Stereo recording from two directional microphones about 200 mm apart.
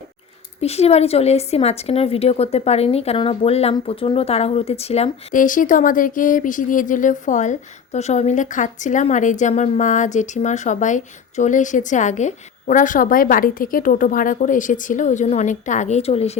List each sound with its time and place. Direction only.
0.6 s speech: 30° left (ahead or behind)